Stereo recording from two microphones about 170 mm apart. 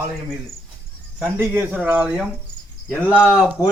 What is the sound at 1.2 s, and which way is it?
Speech, 10° right (ahead or behind).